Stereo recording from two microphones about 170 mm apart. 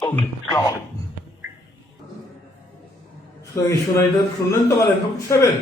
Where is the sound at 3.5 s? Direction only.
20° left (ahead or behind).